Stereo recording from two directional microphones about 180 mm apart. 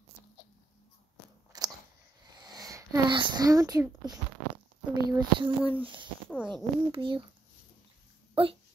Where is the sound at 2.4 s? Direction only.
20° right (ahead or behind).